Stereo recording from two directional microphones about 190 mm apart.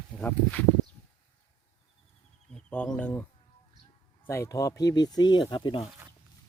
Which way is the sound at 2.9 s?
10° left (ahead or behind).